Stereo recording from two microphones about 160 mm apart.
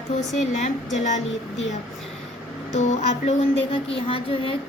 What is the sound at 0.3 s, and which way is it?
Speech, 50° left (ahead or behind).